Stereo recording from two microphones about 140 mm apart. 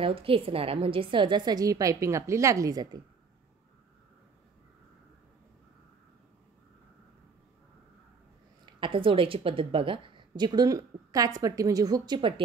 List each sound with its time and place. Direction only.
0.0 s a woman's voice: 40° right (ahead or behind)
8.6 s a woman's voice: 35° right (ahead or behind)